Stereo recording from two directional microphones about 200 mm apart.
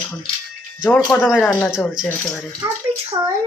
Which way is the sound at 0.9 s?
5° left (ahead or behind).